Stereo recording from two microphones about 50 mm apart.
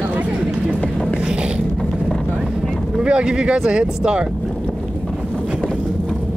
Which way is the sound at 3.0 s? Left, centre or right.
Centre.